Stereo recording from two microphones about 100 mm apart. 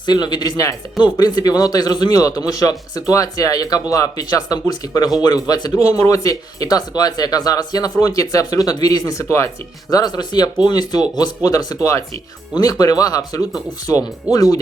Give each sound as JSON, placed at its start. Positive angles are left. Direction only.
{"t": 0.0, "sound": "speech", "side_deg": 45}
{"t": 9.9, "sound": "speech", "side_deg": 40}